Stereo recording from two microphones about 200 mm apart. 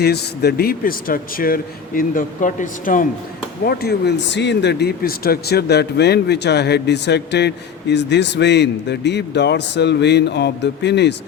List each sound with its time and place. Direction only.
0.0 s a man's voice: 50° left (ahead or behind)